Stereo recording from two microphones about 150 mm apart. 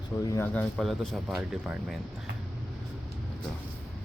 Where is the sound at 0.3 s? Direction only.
15° left (ahead or behind); by 2.0 s 5° right (ahead or behind).